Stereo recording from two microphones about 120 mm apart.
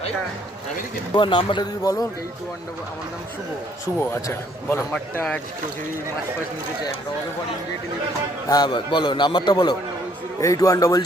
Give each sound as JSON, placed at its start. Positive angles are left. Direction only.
{"t": 1.1, "sound": "speech", "side_deg": 45}
{"t": 4.1, "sound": "a man's voice", "side_deg": 20}
{"t": 4.9, "sound": "speech", "side_deg": 10}
{"t": 8.4, "sound": "a man's voice", "side_deg": 35}